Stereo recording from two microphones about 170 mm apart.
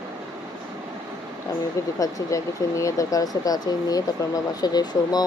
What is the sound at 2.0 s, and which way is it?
Speech, 20° left (ahead or behind).